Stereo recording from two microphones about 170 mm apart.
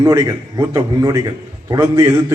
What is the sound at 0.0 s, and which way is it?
A man's voice, 20° right (ahead or behind).